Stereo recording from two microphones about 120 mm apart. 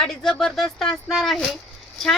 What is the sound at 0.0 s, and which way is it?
A woman's voice, 5° left (ahead or behind).